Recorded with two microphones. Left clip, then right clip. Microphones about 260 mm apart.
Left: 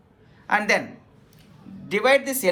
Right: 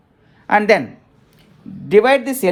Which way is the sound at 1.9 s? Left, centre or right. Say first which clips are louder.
Right 7 dB; right.